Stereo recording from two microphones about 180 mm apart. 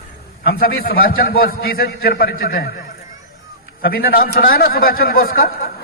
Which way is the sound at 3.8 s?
55° left (ahead or behind).